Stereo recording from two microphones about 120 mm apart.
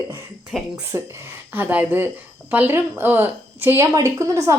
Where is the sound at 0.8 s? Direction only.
20° right (ahead or behind).